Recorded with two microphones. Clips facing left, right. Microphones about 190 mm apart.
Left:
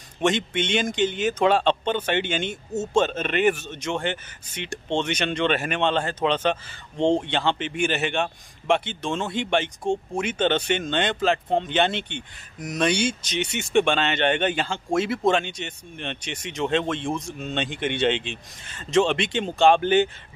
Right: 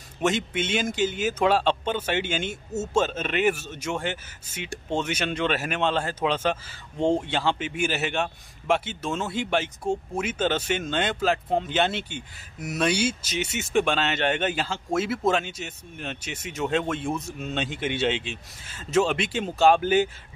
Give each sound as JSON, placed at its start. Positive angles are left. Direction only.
{"t": 0.2, "sound": "speech", "side_deg": -5}